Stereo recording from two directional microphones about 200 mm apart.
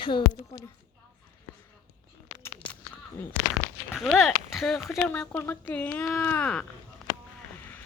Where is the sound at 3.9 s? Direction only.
Centre (ahead or behind).